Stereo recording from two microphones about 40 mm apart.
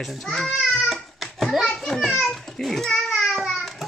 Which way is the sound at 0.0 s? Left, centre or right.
Centre.